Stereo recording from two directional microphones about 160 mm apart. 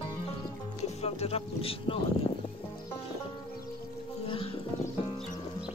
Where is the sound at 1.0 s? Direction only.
40° left (ahead or behind).